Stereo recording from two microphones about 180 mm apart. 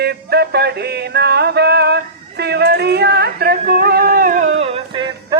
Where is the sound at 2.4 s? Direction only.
65° right (ahead or behind); by 4.5 s 50° right (ahead or behind).